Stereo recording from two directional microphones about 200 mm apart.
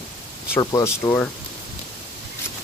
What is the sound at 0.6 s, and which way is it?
Speech, 20° left (ahead or behind).